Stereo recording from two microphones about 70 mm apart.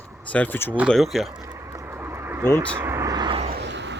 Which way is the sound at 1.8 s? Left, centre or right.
Right.